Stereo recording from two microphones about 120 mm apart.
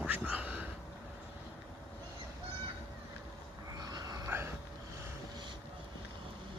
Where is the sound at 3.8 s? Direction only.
35° right (ahead or behind).